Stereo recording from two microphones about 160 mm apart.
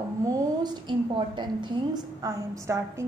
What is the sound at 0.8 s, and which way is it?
A woman's voice, 30° right (ahead or behind).